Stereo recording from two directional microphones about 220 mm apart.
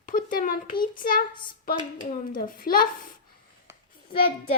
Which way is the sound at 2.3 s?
40° left (ahead or behind).